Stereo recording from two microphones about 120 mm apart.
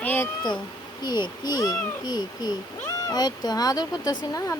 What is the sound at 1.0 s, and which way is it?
Speech, 40° left (ahead or behind).